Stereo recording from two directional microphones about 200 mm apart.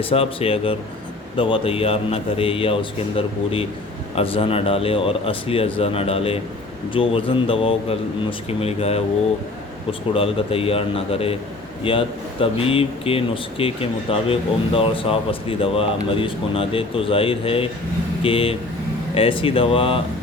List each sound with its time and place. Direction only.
0.1 s speech: 30° left (ahead or behind)
10.1 s speech: 30° left (ahead or behind)